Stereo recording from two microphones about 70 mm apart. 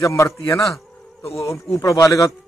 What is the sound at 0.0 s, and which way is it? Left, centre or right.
A man's voice, left.